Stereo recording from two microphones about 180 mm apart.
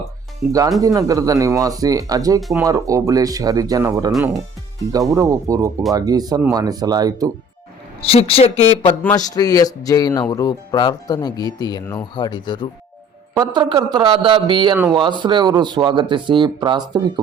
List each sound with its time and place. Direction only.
0.8 s speech: 20° right (ahead or behind)
8.0 s a woman's voice: 30° left (ahead or behind)
9.0 s speech: 20° left (ahead or behind)
13.3 s speech: 25° right (ahead or behind)